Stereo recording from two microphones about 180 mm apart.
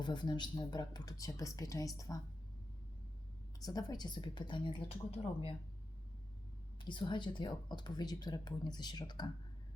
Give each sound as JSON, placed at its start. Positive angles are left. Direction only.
{"t": 0.0, "sound": "speech", "side_deg": 25}
{"t": 3.6, "sound": "speech", "side_deg": 20}
{"t": 6.8, "sound": "speech", "side_deg": 25}